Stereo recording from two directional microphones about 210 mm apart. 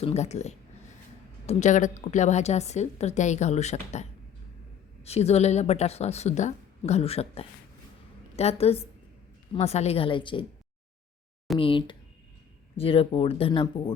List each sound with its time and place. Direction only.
0.0 s a woman's voice: 30° left (ahead or behind)
5.0 s a woman's voice: 30° left (ahead or behind)
11.6 s speech: 25° left (ahead or behind)